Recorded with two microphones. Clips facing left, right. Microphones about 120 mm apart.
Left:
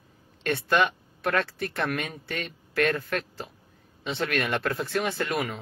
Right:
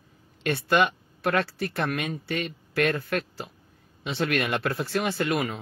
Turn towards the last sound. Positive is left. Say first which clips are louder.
# right 2 dB
turn(degrees=-5)  # may be behind; listen again after turning